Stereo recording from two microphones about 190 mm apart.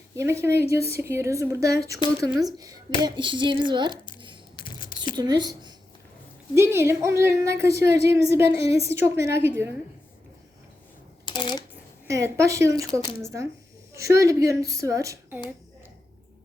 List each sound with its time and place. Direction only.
0.2 s a woman's voice: 15° right (ahead or behind)
11.3 s speech: 25° left (ahead or behind)
12.0 s a woman's voice: 15° right (ahead or behind)